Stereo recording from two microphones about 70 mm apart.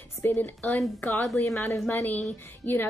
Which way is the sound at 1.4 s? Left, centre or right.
Left.